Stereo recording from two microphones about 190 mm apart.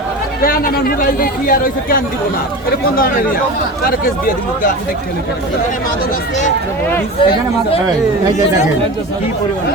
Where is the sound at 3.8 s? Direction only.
50° left (ahead or behind).